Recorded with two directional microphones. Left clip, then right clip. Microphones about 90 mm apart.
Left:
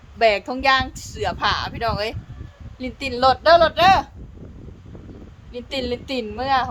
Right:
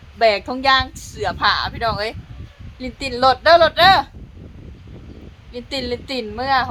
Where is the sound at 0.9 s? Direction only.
60° left (ahead or behind).